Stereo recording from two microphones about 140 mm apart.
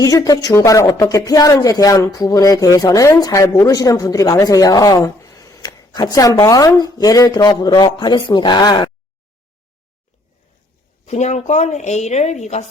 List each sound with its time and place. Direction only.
0.0 s speech: 25° left (ahead or behind)
11.0 s speech: 50° left (ahead or behind)